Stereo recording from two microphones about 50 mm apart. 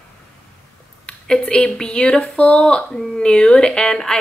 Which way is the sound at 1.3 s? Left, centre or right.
Left.